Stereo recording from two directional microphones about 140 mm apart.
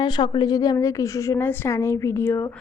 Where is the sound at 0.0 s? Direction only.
30° left (ahead or behind).